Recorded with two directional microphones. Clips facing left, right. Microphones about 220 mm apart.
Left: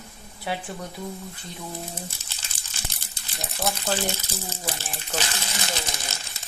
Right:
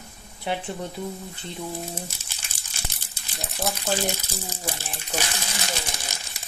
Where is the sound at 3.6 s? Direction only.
15° right (ahead or behind).